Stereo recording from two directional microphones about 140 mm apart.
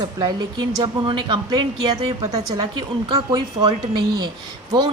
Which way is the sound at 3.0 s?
30° right (ahead or behind).